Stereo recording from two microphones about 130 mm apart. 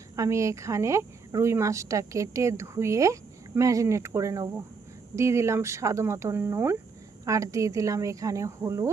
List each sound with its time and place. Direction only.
0.2 s a woman's voice: 25° right (ahead or behind)